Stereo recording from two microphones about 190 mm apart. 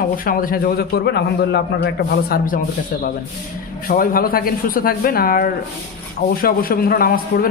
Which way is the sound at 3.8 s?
50° left (ahead or behind).